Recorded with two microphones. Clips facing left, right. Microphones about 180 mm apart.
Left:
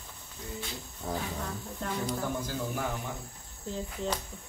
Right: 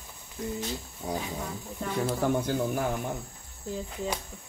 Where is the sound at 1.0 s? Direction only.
15° right (ahead or behind).